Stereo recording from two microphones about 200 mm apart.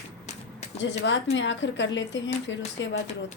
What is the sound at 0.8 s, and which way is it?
A woman's voice, 65° left (ahead or behind).